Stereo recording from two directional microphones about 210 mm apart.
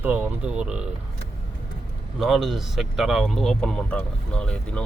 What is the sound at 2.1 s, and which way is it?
A man's voice, centre (ahead or behind).